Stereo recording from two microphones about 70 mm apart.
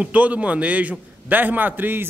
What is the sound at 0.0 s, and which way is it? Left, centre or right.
A man's voice, centre.